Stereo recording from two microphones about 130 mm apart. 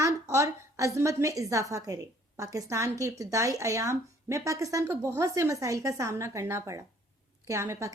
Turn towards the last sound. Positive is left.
turn(degrees=-20)  # may be behind; listen again after turning